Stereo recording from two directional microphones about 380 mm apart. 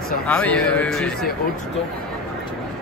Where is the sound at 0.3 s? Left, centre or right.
Centre.